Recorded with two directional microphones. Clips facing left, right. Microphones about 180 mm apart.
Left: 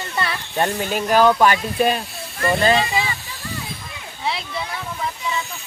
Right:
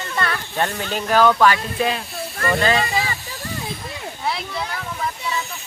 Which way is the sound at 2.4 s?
30° left (ahead or behind).